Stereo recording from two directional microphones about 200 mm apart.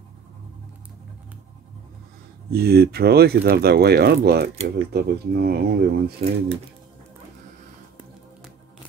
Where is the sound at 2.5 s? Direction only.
50° right (ahead or behind).